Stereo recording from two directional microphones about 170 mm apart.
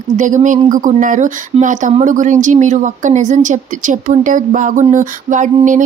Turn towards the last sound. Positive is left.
turn(degrees=-50)  # may be behind; listen again after turning